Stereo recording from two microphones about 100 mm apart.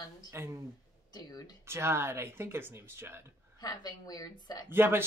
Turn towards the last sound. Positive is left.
turn(degrees=-20)  # may be behind; listen again after turning